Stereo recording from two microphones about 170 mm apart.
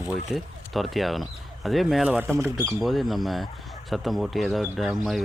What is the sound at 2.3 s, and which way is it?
Speech, 20° right (ahead or behind).